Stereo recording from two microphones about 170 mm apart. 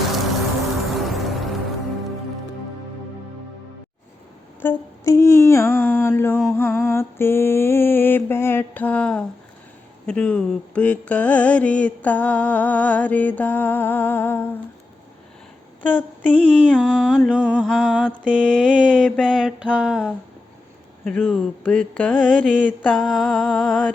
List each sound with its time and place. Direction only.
0.9 s music: centre (ahead or behind)
4.6 s humming: 15° left (ahead or behind)
6.5 s mantra: 15° left (ahead or behind)
15.8 s mantra: 10° left (ahead or behind)
18.3 s mantra: 5° left (ahead or behind)